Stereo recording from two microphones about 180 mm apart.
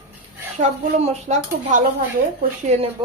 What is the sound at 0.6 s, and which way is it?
Speech, 40° right (ahead or behind).